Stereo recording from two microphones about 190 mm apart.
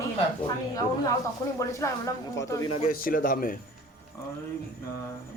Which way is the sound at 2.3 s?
15° left (ahead or behind).